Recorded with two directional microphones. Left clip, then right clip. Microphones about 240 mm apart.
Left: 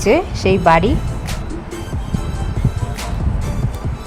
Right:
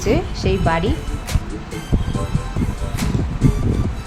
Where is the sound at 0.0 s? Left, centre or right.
Centre.